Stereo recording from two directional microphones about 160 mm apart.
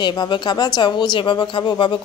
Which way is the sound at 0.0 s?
25° left (ahead or behind).